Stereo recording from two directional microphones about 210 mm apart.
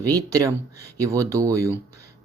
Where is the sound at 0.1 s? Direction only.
15° right (ahead or behind).